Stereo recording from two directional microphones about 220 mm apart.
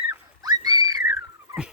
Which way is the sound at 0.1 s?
15° right (ahead or behind).